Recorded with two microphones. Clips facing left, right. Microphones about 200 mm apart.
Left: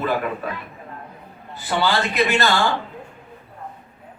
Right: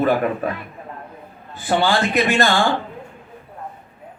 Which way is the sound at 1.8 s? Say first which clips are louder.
Right 1 dB; 50° right (ahead or behind).